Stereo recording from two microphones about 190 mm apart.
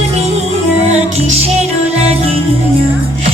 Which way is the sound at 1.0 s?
35° right (ahead or behind).